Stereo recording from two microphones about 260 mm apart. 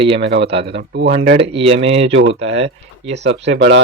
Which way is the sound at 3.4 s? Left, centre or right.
Right.